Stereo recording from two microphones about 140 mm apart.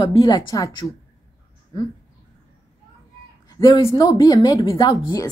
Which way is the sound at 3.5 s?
35° left (ahead or behind).